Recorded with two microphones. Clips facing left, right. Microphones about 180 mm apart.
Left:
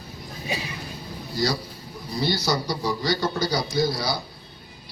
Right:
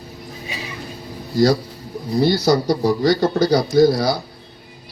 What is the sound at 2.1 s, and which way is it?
A man's voice, 50° right (ahead or behind).